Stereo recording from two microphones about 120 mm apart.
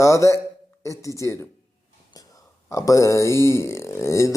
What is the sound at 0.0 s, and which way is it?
Speech, 25° left (ahead or behind).